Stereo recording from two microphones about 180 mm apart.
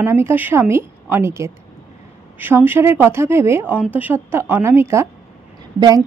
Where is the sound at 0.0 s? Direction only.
15° right (ahead or behind).